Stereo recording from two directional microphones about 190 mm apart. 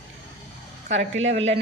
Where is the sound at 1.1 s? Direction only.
75° right (ahead or behind).